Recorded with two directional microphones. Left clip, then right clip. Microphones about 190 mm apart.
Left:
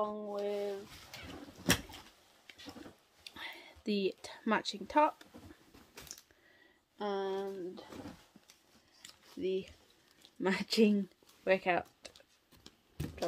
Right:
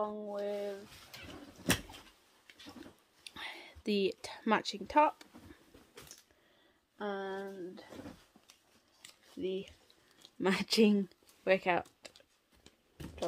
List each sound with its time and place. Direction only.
0.0 s rub: 15° right (ahead or behind)
3.3 s whispering: 30° right (ahead or behind)
7.0 s speech: 5° right (ahead or behind)
9.4 s speech: 15° right (ahead or behind)
10.4 s speech: 30° right (ahead or behind)